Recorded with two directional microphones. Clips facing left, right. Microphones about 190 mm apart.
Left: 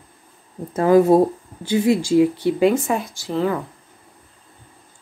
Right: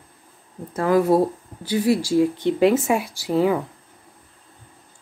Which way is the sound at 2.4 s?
5° left (ahead or behind).